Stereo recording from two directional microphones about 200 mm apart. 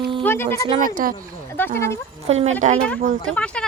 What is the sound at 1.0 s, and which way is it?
Speech, 45° right (ahead or behind).